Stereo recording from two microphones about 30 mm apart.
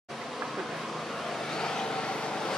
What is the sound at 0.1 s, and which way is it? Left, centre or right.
Vehicle, centre.